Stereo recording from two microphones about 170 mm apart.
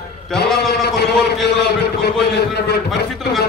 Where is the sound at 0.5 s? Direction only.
70° left (ahead or behind).